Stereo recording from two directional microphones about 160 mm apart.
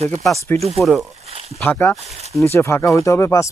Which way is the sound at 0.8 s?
Centre (ahead or behind).